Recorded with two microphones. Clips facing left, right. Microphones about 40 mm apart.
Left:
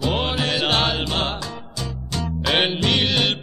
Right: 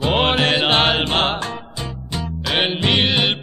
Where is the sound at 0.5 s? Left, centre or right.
Right.